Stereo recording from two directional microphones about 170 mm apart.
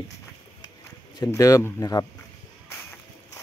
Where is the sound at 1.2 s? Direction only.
20° left (ahead or behind).